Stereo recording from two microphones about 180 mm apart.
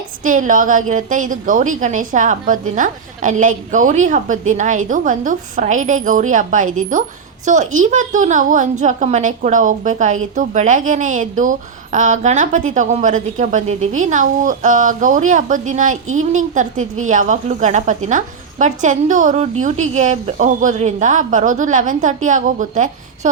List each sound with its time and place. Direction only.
0.3 s a woman's voice: 45° right (ahead or behind)